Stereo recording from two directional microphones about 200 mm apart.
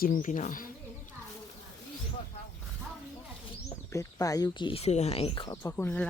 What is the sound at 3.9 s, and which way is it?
Speech, 15° left (ahead or behind).